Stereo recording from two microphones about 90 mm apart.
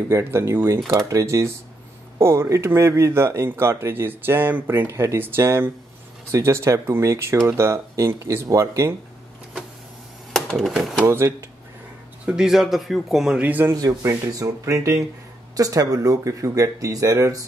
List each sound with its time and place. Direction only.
0.1 s speech: 30° right (ahead or behind)
10.3 s a sound: 5° left (ahead or behind)
10.7 s a man's voice: centre (ahead or behind)
11.1 s speech: 30° right (ahead or behind)
12.3 s a man's voice: 5° right (ahead or behind)
13.4 s speech: 20° right (ahead or behind)
13.7 s speech: 40° right (ahead or behind)